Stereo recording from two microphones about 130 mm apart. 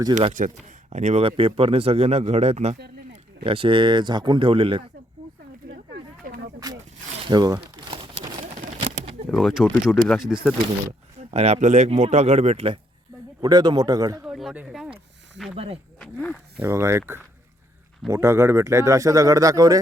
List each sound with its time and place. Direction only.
0.1 s a man's voice: 35° right (ahead or behind)
0.9 s speech: 60° right (ahead or behind)
1.4 s speech: 45° right (ahead or behind)
6.2 s a sound: 90° right
7.3 s a sound: 30° right (ahead or behind)
8.5 s a sound: 65° right (ahead or behind)
9.3 s speech: centre (ahead or behind)
11.2 s speech: 55° right (ahead or behind)
13.4 s a man's voice: 35° right (ahead or behind)
14.2 s speech: 5° right (ahead or behind)
15.5 s speech: 50° right (ahead or behind)
16.0 s wild animals: 10° left (ahead or behind)
16.6 s speech: 20° right (ahead or behind)
18.1 s speech: 20° right (ahead or behind)